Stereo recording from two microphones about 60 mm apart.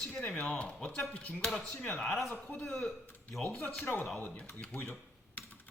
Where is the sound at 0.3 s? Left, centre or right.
Centre.